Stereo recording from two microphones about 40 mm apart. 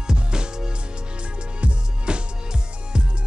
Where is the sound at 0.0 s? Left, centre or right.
Right.